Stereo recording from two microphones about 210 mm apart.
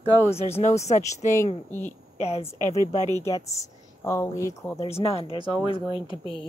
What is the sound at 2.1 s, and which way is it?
Speech, 30° left (ahead or behind).